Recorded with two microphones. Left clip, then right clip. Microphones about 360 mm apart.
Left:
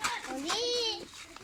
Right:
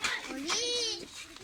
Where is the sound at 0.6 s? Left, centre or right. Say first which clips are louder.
Left 2 dB; left.